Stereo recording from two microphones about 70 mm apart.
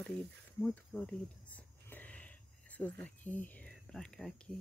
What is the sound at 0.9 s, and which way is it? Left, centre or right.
Speech, left.